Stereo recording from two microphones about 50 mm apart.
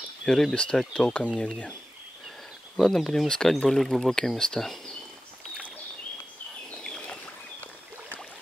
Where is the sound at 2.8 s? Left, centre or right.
Centre.